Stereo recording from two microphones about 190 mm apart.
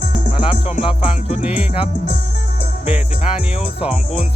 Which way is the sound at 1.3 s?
5° right (ahead or behind).